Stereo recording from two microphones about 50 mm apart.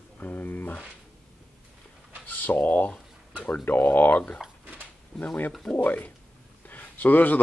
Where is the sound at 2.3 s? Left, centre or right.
Left.